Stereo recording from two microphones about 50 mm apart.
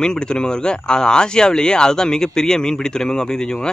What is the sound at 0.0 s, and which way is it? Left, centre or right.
Speech, centre.